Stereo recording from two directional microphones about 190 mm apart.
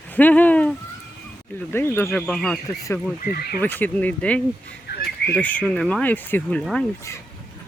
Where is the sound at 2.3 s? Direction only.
Centre (ahead or behind).